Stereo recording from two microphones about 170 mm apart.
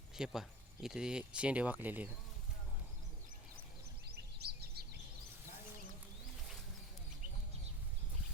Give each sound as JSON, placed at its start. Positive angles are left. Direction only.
{"t": 0.2, "sound": "speech", "side_deg": 0}
{"t": 4.1, "sound": "chirp", "side_deg": -70}